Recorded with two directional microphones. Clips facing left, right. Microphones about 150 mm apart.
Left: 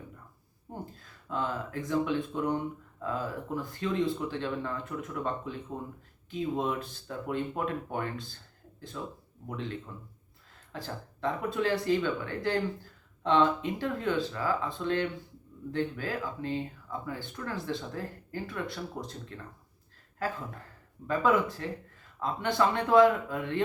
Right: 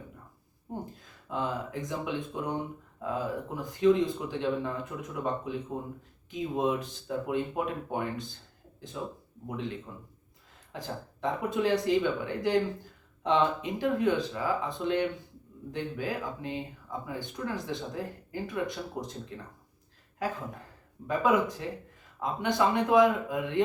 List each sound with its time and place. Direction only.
1.3 s speech: 15° right (ahead or behind)
10.7 s speech: 15° right (ahead or behind)
20.1 s speech: 15° right (ahead or behind)